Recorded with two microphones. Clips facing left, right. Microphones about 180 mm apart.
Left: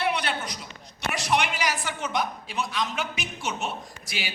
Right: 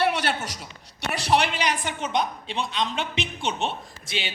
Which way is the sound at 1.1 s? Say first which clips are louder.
Right 3 dB; 35° right (ahead or behind).